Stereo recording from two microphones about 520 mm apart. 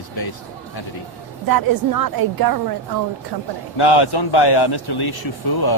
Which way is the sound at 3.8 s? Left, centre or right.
Left.